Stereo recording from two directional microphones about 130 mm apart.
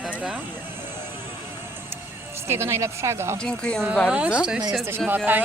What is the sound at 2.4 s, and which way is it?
Speech, 20° right (ahead or behind).